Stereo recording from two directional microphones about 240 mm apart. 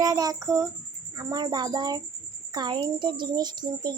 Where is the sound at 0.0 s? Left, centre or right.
Centre.